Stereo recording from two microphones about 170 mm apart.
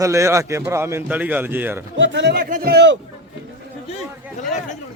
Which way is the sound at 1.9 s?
90° right.